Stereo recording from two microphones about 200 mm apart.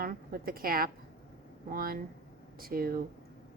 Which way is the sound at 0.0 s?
45° right (ahead or behind).